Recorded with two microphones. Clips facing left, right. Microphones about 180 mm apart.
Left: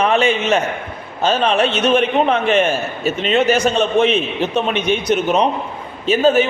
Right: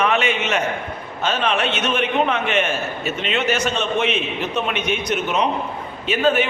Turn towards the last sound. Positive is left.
turn(degrees=40)  # may be behind; listen again after turning